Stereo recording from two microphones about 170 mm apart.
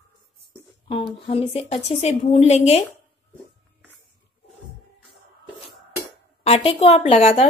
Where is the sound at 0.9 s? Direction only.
35° left (ahead or behind).